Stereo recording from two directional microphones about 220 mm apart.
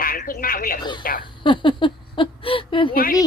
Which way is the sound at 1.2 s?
20° left (ahead or behind).